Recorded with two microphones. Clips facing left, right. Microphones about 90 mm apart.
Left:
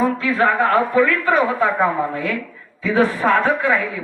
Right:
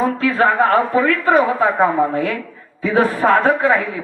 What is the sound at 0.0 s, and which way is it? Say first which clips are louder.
Speech: right 2 dB; 40° right (ahead or behind).